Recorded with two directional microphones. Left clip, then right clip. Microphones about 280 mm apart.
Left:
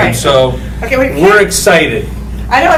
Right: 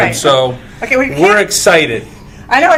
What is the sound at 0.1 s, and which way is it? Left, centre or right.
Speech, right.